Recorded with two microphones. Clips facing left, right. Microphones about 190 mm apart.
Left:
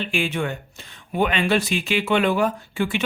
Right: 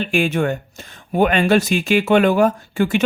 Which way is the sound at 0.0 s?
45° right (ahead or behind).